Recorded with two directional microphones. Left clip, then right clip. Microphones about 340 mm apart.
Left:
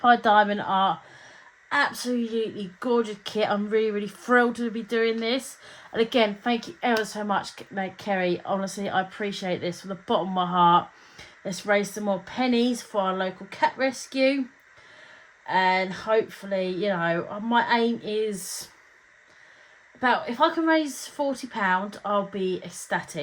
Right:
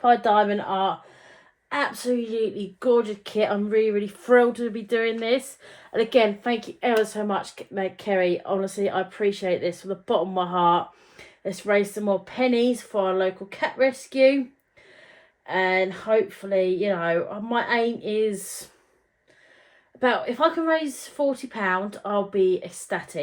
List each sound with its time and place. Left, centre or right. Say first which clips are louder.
0.0 s speech: even; centre
15.4 s speech: even; left
20.0 s speech: right 1 dB; centre